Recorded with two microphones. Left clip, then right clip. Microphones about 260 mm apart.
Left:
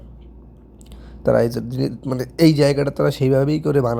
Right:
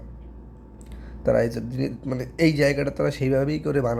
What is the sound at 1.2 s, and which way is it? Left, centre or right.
Speech, centre.